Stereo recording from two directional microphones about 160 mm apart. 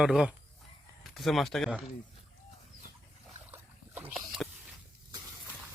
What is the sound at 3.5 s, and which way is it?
Boat, 15° right (ahead or behind).